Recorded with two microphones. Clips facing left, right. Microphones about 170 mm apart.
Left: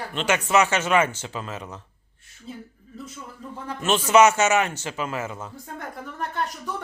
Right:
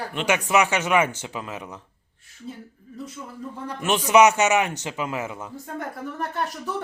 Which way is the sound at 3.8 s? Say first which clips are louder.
Even; 15° right (ahead or behind).